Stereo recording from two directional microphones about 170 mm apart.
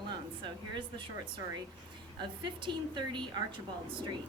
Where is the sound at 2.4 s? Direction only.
25° right (ahead or behind).